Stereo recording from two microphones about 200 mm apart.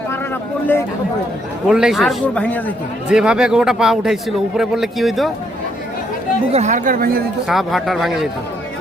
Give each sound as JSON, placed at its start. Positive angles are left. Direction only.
{"t": 1.6, "sound": "speech", "side_deg": -5}
{"t": 3.1, "sound": "speech", "side_deg": -5}
{"t": 6.5, "sound": "speech", "side_deg": -35}
{"t": 7.4, "sound": "speech", "side_deg": 0}